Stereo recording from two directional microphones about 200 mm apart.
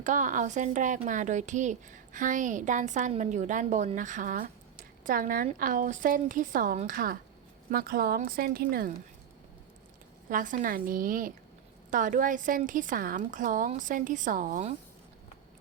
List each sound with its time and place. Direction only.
0.0 s a woman's voice: 40° right (ahead or behind)
10.2 s a woman's voice: 40° right (ahead or behind)